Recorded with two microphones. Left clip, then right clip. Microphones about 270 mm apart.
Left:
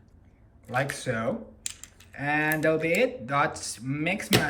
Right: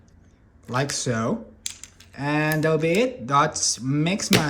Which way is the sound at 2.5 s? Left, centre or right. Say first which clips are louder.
Right 3 dB; centre.